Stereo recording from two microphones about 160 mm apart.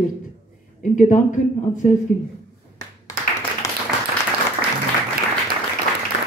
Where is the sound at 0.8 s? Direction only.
50° left (ahead or behind).